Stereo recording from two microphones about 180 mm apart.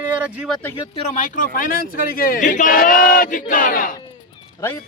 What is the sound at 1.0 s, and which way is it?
Speech, 40° left (ahead or behind).